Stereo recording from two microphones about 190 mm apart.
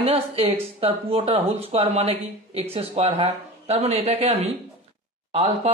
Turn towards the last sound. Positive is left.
turn(degrees=-35)  # may be behind; listen again after turning